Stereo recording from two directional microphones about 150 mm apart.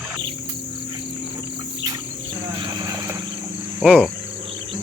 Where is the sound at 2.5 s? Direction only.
30° right (ahead or behind).